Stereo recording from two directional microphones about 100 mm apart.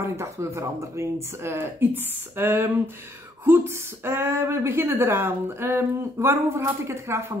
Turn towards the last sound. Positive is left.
turn(degrees=-25)  # may be behind; listen again after turning